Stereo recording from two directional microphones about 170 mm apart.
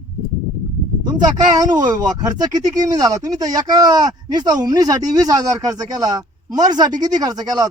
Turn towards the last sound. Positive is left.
turn(degrees=-20)  # may be behind; listen again after turning